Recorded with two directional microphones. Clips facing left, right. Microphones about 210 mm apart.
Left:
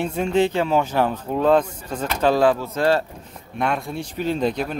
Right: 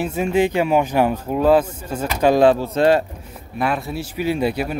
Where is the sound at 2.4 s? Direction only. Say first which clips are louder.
Right 4 dB; 25° right (ahead or behind).